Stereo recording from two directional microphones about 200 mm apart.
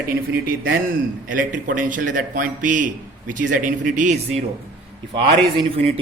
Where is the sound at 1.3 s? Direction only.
45° right (ahead or behind).